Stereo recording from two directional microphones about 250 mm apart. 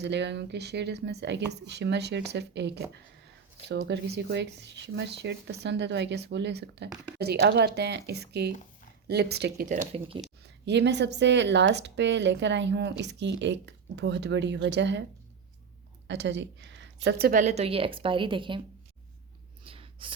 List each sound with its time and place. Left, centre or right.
0.0 s speech: right
16.0 s a woman's voice: right; by 18.6 s centre
19.6 s a sound: right